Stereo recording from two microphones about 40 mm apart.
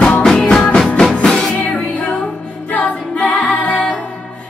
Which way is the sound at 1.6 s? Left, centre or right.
Left.